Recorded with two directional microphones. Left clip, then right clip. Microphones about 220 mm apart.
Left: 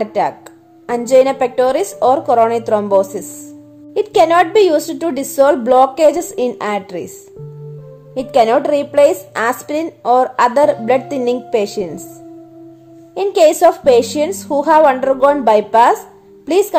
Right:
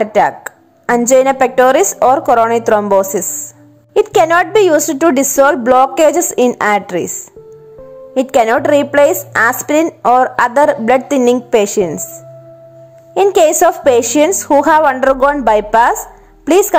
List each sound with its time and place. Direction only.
0.0 s a woman's voice: 15° right (ahead or behind)
5.4 s a woman's voice: 10° right (ahead or behind)
13.1 s a woman's voice: 15° right (ahead or behind)